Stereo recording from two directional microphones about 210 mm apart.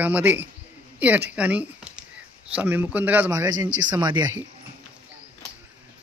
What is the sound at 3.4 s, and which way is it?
Speech, 20° right (ahead or behind).